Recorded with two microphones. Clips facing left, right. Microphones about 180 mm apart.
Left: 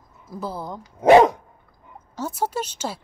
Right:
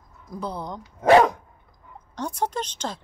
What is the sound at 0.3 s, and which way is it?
Speech, 5° left (ahead or behind).